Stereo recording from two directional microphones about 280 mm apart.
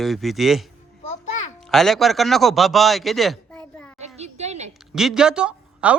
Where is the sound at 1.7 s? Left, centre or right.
Centre.